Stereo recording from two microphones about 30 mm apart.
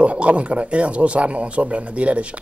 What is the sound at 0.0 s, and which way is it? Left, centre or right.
Speech, right.